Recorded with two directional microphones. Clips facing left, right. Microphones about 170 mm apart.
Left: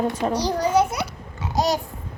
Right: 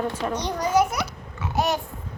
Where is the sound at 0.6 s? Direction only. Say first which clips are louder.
Right 1 dB; 30° left (ahead or behind).